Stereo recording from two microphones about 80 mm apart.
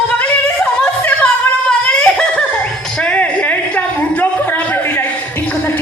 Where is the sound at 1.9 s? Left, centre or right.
Centre.